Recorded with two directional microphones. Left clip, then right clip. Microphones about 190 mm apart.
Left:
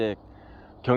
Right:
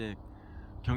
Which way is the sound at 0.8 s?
15° left (ahead or behind).